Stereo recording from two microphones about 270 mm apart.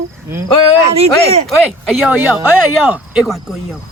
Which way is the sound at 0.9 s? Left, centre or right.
Right.